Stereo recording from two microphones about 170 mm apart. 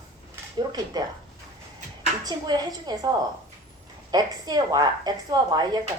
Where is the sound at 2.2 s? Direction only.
20° right (ahead or behind).